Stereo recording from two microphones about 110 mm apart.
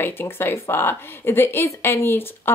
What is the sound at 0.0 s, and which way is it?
Speech, 20° left (ahead or behind).